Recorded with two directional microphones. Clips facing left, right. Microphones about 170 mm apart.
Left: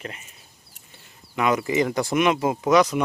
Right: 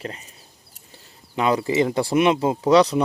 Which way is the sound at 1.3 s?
30° right (ahead or behind).